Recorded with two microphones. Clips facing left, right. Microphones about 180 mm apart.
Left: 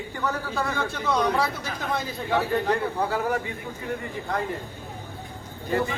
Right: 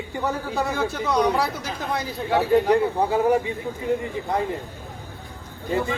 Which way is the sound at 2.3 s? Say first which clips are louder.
Right 6 dB; 15° right (ahead or behind).